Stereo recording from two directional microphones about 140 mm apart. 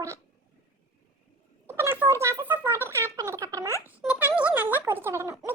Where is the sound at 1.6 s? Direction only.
15° right (ahead or behind).